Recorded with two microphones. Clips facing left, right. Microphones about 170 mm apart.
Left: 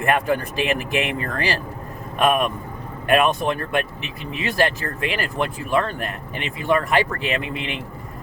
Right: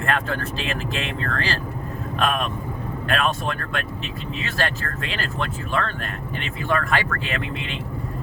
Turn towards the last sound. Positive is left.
turn(degrees=15)  # may be behind; listen again after turning